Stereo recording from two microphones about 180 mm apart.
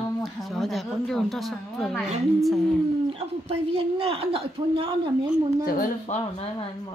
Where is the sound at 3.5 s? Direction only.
30° right (ahead or behind).